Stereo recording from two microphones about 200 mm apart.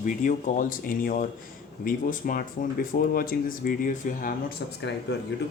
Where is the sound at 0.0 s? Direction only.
40° left (ahead or behind).